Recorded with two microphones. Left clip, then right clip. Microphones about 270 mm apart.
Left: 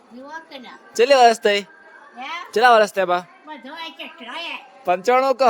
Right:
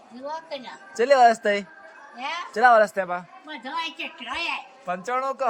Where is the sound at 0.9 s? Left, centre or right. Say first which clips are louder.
Left 4 dB; left.